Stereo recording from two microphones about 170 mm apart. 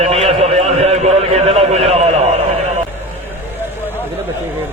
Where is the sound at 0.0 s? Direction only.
35° right (ahead or behind).